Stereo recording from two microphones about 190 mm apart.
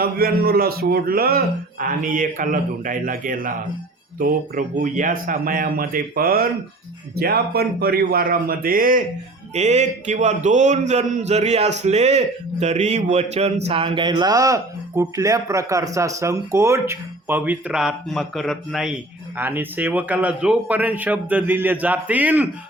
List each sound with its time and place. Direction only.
0.0 s a man's voice: 50° right (ahead or behind); by 22.4 s 10° right (ahead or behind)